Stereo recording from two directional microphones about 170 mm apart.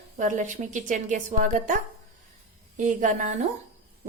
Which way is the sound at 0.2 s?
45° right (ahead or behind).